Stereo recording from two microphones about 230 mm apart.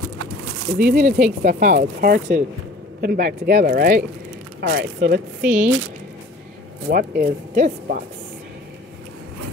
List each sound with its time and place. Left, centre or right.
0.8 s speech: right
5.4 s speech: centre
6.9 s speech: right